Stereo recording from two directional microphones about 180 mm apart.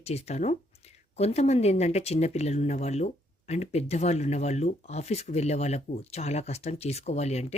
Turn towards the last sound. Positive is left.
turn(degrees=35)  # may be behind; listen again after turning